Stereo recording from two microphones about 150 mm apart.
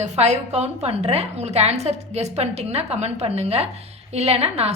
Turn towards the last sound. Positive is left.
turn(degrees=-45)  # may be behind; listen again after turning